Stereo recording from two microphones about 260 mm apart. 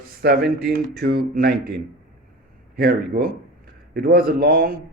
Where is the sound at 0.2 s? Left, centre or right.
Right.